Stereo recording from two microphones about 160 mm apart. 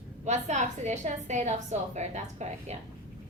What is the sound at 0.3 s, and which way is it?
A woman's voice, 45° right (ahead or behind).